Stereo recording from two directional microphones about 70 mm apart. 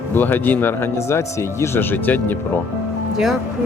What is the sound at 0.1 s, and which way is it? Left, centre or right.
Speech, left.